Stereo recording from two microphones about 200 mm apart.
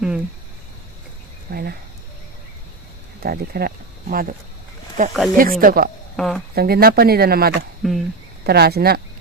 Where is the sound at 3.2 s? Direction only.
50° right (ahead or behind).